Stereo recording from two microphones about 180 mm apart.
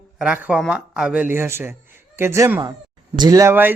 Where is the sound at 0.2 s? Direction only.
5° right (ahead or behind).